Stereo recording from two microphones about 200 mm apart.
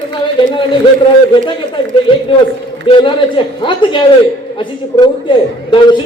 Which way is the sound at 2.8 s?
25° left (ahead or behind).